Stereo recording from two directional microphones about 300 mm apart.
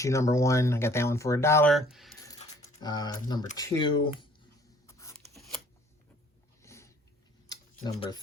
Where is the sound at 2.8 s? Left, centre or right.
Centre.